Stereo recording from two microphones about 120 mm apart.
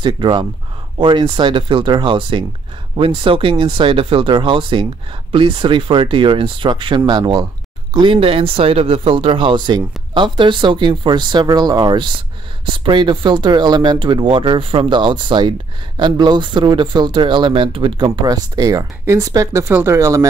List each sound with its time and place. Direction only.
0.0 s speech: 40° right (ahead or behind)
7.9 s speech: 45° right (ahead or behind); by 20.2 s 25° right (ahead or behind)